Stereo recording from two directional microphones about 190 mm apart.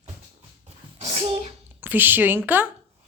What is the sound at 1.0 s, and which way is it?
Sneeze, 30° right (ahead or behind).